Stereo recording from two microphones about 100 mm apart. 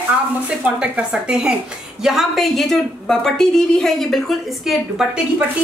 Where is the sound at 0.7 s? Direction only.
10° right (ahead or behind).